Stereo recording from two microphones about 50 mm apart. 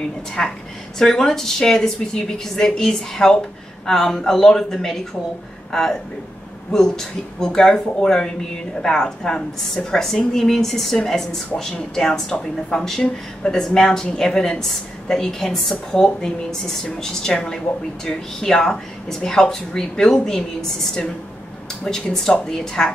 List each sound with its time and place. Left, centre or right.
0.4 s a woman's voice: centre
21.8 s a woman's voice: centre